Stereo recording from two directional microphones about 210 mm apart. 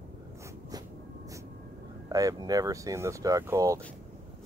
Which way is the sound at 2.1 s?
15° right (ahead or behind).